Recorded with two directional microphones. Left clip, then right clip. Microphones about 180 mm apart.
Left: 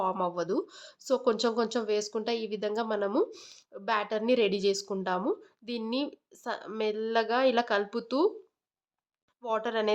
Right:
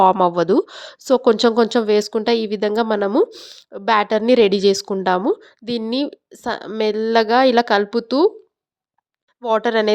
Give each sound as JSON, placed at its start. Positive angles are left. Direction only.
{"t": 0.0, "sound": "speech", "side_deg": -45}
{"t": 3.2, "sound": "speech", "side_deg": -30}
{"t": 3.7, "sound": "a woman's voice", "side_deg": -45}
{"t": 9.4, "sound": "a woman's voice", "side_deg": -40}